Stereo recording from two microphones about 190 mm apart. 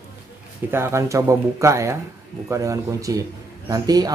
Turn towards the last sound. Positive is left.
turn(degrees=-20)  # may be behind; listen again after turning